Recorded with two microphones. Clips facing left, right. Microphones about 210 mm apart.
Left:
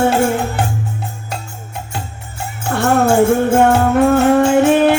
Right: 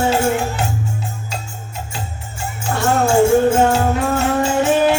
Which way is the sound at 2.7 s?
55° left (ahead or behind).